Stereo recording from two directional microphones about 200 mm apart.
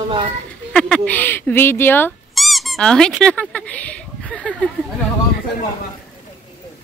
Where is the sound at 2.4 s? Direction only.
Centre (ahead or behind).